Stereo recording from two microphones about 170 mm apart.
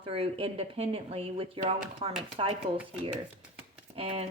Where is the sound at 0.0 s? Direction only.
35° right (ahead or behind).